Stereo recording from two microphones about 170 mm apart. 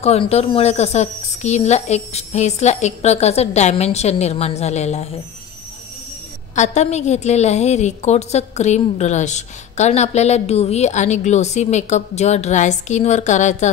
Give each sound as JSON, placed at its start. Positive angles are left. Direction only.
{"t": 0.0, "sound": "a woman's voice", "side_deg": 40}
{"t": 6.5, "sound": "a woman's voice", "side_deg": 45}